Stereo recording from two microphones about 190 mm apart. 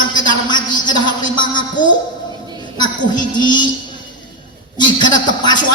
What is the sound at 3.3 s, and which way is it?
Speech, 25° left (ahead or behind).